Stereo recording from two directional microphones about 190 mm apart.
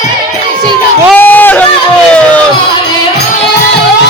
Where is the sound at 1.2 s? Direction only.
10° left (ahead or behind).